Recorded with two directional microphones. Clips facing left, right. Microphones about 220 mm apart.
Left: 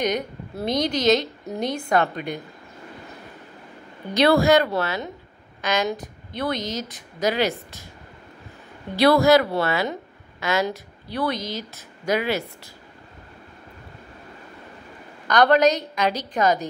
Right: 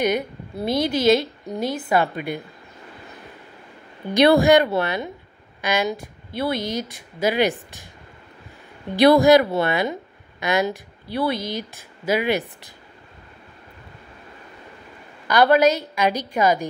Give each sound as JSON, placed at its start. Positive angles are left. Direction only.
{"t": 0.0, "sound": "a woman's voice", "side_deg": -10}
{"t": 4.1, "sound": "a woman's voice", "side_deg": -15}
{"t": 8.9, "sound": "a woman's voice", "side_deg": -15}
{"t": 15.2, "sound": "a woman's voice", "side_deg": -10}